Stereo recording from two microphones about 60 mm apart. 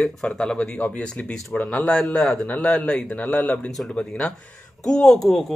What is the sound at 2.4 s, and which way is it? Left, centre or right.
Speech, left.